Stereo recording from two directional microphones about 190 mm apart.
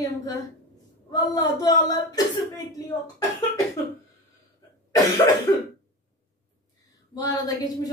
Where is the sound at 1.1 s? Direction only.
20° left (ahead or behind).